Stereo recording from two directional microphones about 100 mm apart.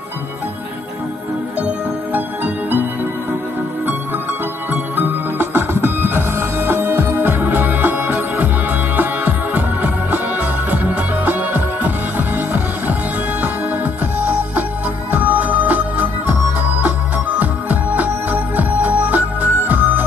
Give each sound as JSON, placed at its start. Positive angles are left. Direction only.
{"t": 2.1, "sound": "music", "side_deg": -20}
{"t": 4.9, "sound": "music", "side_deg": -20}
{"t": 14.2, "sound": "music", "side_deg": -15}
{"t": 17.4, "sound": "music", "side_deg": -15}